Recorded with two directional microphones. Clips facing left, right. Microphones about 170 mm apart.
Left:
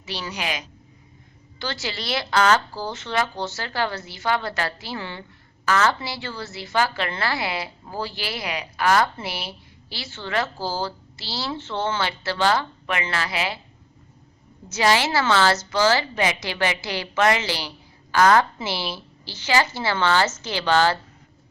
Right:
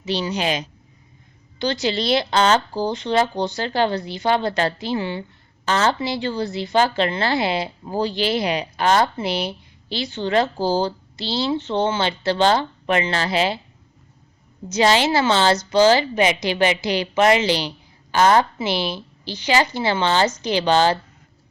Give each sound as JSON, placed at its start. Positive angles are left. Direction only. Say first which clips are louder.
{"t": 0.0, "sound": "a woman's voice", "louder": "right 8 dB", "side_deg": -20}
{"t": 14.7, "sound": "a woman's voice", "louder": "right 3 dB", "side_deg": -20}